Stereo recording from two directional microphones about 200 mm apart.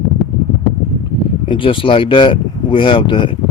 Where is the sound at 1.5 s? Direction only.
25° left (ahead or behind).